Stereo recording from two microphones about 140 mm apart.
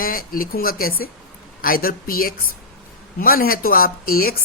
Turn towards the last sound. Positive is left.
turn(degrees=90)